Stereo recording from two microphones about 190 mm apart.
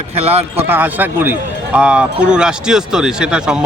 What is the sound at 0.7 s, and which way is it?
Speech, 10° right (ahead or behind).